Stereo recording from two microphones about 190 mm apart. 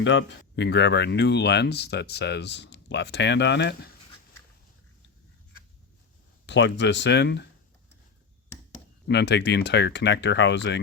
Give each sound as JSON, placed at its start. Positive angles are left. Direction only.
{"t": 0.0, "sound": "speech", "side_deg": 70}
{"t": 6.4, "sound": "speech", "side_deg": 70}
{"t": 9.0, "sound": "speech", "side_deg": 65}